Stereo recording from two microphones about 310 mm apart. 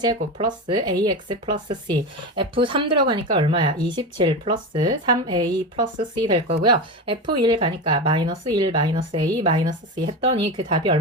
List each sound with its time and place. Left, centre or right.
0.2 s speech: centre